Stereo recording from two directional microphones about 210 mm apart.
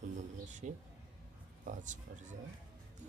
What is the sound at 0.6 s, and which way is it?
Speech, 35° right (ahead or behind).